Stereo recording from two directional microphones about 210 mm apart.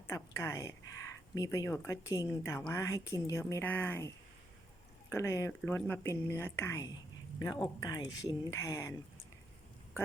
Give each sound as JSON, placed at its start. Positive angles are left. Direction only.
{"t": 0.1, "sound": "speech", "side_deg": 15}
{"t": 5.1, "sound": "speech", "side_deg": 15}